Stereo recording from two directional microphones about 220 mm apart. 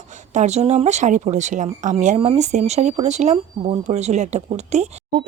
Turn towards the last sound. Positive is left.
turn(degrees=-30)  # may be behind; listen again after turning